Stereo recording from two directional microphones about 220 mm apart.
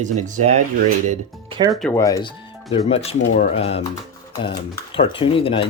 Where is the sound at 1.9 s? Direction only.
15° left (ahead or behind).